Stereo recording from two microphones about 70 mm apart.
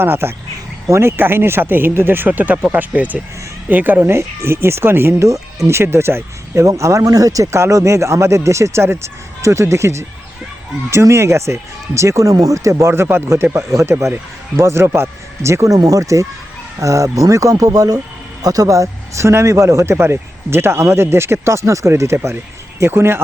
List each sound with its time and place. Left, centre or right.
0.0 s speech: right
5.3 s speech: right
6.7 s speech: right
12.9 s speech: right